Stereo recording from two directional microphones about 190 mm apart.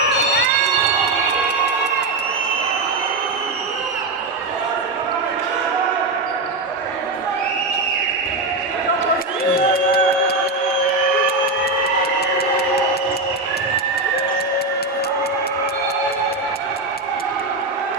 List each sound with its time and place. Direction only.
9.4 s music: 55° left (ahead or behind)